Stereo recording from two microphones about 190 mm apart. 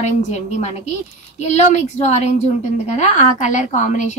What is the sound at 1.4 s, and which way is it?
A child's voice, 35° left (ahead or behind).